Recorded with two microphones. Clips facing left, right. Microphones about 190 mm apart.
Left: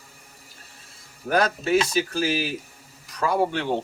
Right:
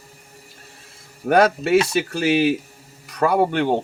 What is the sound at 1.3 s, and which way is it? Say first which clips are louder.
Speech: right 6 dB; 65° right (ahead or behind).